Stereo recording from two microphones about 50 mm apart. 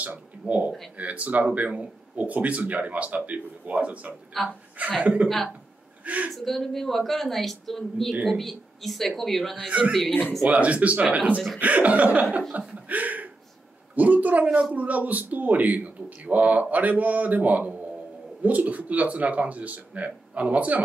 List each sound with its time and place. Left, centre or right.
0.0 s speech: right
4.4 s speech: centre
5.0 s a man's voice: right
6.3 s speech: centre
9.7 s a man's voice: right